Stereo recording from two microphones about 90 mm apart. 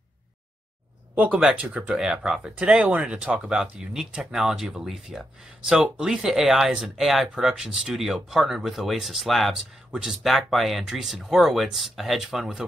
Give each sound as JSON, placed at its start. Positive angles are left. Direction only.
{"t": 1.1, "sound": "speech", "side_deg": -15}